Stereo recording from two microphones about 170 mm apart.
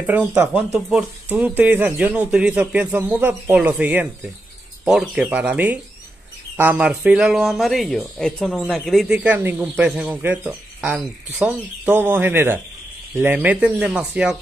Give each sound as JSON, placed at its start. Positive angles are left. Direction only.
{"t": 0.0, "sound": "speech", "side_deg": -10}